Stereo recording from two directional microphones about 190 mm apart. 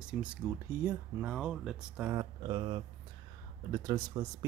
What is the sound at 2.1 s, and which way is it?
Speech, 20° right (ahead or behind).